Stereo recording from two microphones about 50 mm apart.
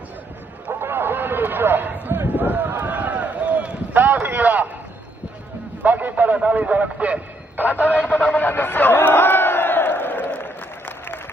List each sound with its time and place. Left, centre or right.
0.7 s a sound: right
5.9 s a man's voice: right
8.1 s crowd: left